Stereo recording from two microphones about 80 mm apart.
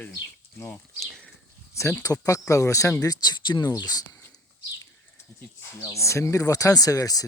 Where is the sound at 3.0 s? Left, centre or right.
Left.